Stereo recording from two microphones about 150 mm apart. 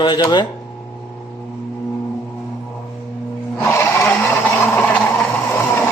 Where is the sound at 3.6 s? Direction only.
15° left (ahead or behind).